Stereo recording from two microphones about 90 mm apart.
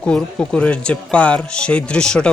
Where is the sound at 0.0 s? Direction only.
10° left (ahead or behind).